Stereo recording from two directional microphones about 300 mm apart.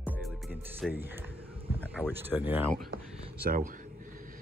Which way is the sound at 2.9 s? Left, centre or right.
Right.